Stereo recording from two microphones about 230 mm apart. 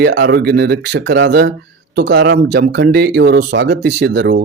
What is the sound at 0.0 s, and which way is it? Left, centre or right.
Speech, right.